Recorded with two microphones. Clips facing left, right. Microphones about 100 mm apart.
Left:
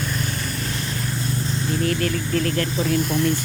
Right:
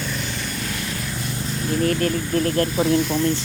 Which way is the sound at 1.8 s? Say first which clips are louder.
Right 3 dB; 35° right (ahead or behind).